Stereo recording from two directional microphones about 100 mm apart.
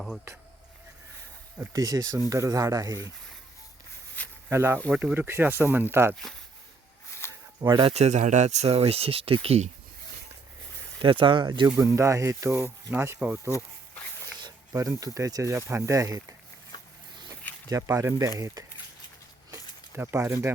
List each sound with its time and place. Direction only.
1.7 s speech: 40° right (ahead or behind)
4.4 s speech: 25° right (ahead or behind)
4.9 s speech: 10° right (ahead or behind)
5.1 s speech: 20° right (ahead or behind)
7.2 s a sound: 25° left (ahead or behind)
7.6 s speech: 45° right (ahead or behind)
7.9 s speech: 90° right
11.0 s speech: 60° right (ahead or behind)
11.9 s speech: 30° right (ahead or behind)
14.7 s speech: 30° right (ahead or behind)
16.7 s a sound: 45° left (ahead or behind)
17.7 s speech: 35° right (ahead or behind)
20.0 s speech: 25° right (ahead or behind)